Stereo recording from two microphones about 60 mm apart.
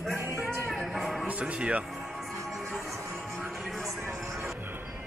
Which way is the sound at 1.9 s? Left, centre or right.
Centre.